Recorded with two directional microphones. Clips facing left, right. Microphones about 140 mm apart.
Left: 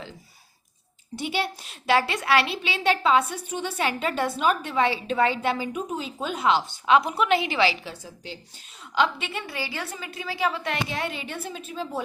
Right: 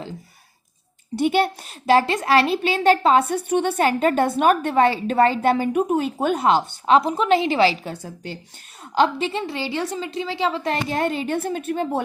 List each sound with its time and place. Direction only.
1.1 s a child's voice: 50° right (ahead or behind)
8.0 s a child's voice: 50° right (ahead or behind)
9.0 s a woman's voice: 35° right (ahead or behind); by 11.9 s 60° right (ahead or behind)